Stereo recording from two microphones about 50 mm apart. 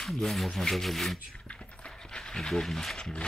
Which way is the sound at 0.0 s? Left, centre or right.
Centre.